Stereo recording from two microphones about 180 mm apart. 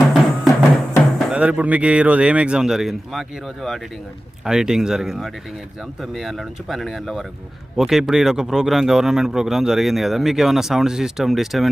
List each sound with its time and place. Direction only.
0.0 s music: centre (ahead or behind)
1.2 s speech: 5° right (ahead or behind)